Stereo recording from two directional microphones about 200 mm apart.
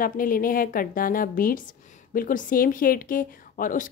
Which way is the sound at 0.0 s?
45° left (ahead or behind).